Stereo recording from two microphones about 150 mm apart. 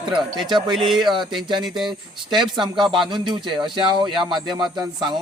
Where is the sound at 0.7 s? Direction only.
Centre (ahead or behind).